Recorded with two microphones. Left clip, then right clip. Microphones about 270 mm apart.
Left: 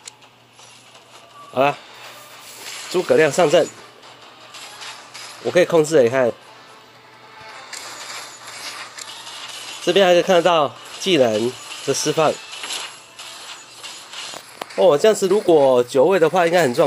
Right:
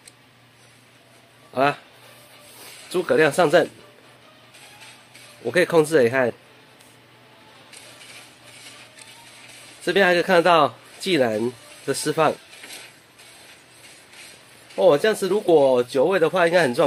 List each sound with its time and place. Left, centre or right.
1.5 s speech: centre
3.1 s speech: centre
4.6 s mechanisms: centre
8.6 s a sound: centre
9.8 s speech: centre
12.2 s mechanisms: centre
14.8 s speech: centre